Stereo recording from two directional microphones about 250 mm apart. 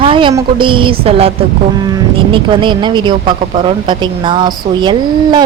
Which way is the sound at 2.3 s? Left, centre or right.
Centre.